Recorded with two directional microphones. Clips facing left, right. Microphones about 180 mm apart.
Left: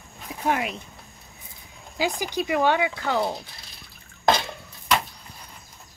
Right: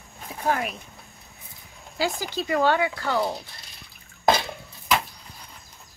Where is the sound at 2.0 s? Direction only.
15° left (ahead or behind).